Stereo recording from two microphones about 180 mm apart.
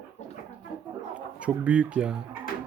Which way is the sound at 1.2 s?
5° right (ahead or behind).